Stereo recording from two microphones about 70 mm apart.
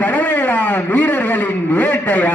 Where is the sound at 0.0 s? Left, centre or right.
Left.